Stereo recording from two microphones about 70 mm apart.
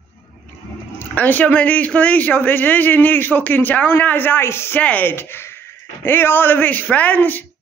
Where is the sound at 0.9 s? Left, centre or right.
Left.